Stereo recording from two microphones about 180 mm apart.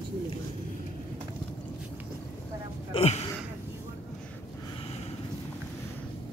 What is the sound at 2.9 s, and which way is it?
Speech, 35° left (ahead or behind).